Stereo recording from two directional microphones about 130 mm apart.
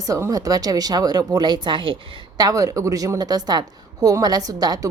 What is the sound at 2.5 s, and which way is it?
A woman's voice, 25° right (ahead or behind).